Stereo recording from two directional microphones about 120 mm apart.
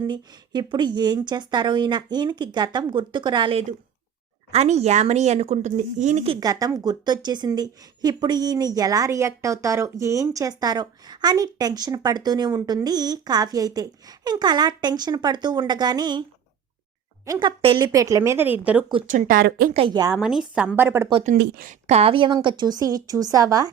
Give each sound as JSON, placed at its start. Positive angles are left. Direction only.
{"t": 0.1, "sound": "a woman's voice", "side_deg": -40}
{"t": 4.5, "sound": "speech", "side_deg": -65}
{"t": 6.4, "sound": "a woman's voice", "side_deg": -30}
{"t": 17.3, "sound": "speech", "side_deg": -30}
{"t": 19.0, "sound": "speech", "side_deg": -90}
{"t": 19.9, "sound": "a woman's voice", "side_deg": -30}
{"t": 20.1, "sound": "a woman's voice", "side_deg": -5}
{"t": 21.2, "sound": "a woman's voice", "side_deg": -75}